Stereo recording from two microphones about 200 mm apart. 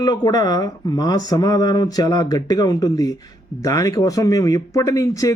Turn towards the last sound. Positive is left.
turn(degrees=15)  # may be behind; listen again after turning